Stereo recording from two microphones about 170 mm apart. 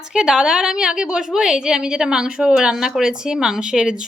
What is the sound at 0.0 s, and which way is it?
A woman's voice, 5° right (ahead or behind).